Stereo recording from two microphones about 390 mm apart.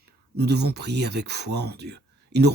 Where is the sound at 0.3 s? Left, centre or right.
Right.